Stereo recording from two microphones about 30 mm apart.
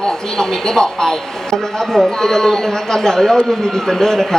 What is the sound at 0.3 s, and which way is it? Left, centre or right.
A woman's voice, centre.